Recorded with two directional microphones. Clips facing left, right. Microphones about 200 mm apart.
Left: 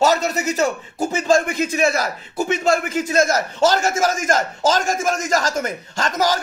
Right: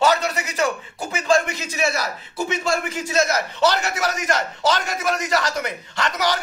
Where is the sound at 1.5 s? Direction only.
50° left (ahead or behind).